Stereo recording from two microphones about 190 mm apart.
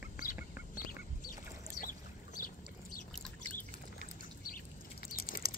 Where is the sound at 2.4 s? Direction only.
50° left (ahead or behind).